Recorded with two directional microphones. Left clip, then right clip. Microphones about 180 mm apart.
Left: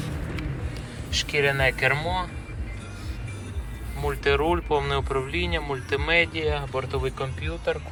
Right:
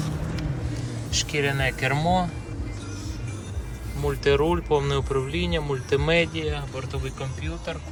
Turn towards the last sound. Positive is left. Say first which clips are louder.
# left 5 dB
turn(degrees=0)  # may be behind; listen again after turning